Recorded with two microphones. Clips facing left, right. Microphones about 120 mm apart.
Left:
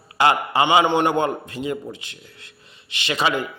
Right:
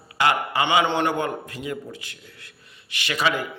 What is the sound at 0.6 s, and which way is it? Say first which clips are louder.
A man's voice: left 4 dB; 15° left (ahead or behind).